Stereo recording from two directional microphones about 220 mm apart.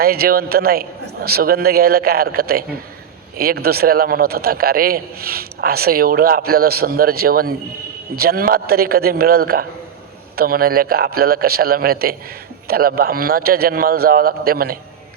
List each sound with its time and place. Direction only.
0.0 s a man's voice: 45° right (ahead or behind)